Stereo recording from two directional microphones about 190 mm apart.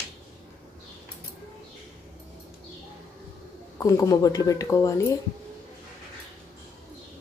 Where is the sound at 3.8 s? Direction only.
20° left (ahead or behind).